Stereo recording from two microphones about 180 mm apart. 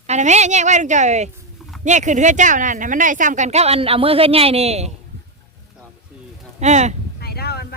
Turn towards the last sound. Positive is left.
turn(degrees=65)  # may be behind; listen again after turning